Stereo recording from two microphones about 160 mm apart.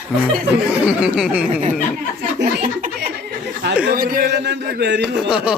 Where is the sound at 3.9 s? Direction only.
60° right (ahead or behind); by 5.0 s 90° right.